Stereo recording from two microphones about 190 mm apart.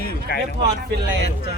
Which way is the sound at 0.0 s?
50° left (ahead or behind).